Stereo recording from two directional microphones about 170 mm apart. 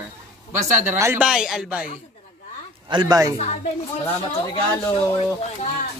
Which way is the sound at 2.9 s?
25° right (ahead or behind).